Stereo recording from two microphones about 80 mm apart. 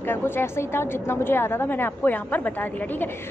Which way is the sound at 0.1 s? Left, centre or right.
Left.